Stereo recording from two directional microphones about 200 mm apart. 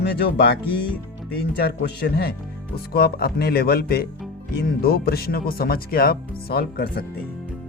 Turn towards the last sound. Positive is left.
turn(degrees=50)  # may be behind; listen again after turning